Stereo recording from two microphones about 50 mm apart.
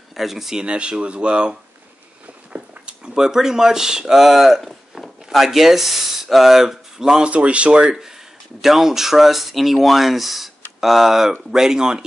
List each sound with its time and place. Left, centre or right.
0.1 s speech: centre
0.7 s speech: centre
7.2 s speech: right
8.5 s speech: centre